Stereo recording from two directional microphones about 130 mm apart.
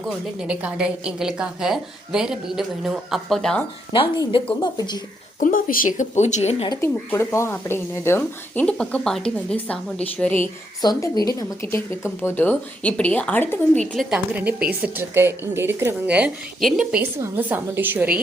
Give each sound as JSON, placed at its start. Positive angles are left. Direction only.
{"t": 0.3, "sound": "a woman's voice", "side_deg": -10}
{"t": 3.9, "sound": "speech", "side_deg": 40}
{"t": 5.4, "sound": "speech", "side_deg": 90}
{"t": 6.8, "sound": "a woman's voice", "side_deg": 15}
{"t": 10.8, "sound": "a woman's voice", "side_deg": 30}
{"t": 13.9, "sound": "a woman's voice", "side_deg": 0}
{"t": 14.3, "sound": "a woman's voice", "side_deg": -15}
{"t": 17.0, "sound": "a woman's voice", "side_deg": -15}